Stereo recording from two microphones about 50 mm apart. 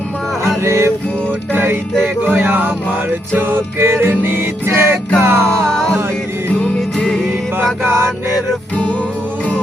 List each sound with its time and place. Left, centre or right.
0.4 s music: right
1.5 s music: right
2.2 s a sound: right
3.3 s music: right
5.5 s music: centre
7.0 s music: centre
7.8 s mantra: right